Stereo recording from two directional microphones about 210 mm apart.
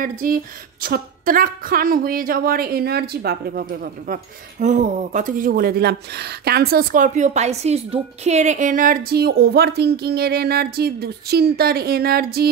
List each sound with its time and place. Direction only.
0.0 s speech: 40° right (ahead or behind)
4.1 s speech: 35° right (ahead or behind)